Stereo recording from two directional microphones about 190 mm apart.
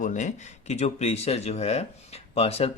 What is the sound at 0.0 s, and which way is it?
Speech, 40° left (ahead or behind).